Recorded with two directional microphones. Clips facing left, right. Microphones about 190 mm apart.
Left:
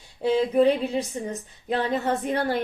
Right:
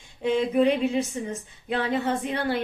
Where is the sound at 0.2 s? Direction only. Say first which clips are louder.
Left 2 dB; 35° left (ahead or behind).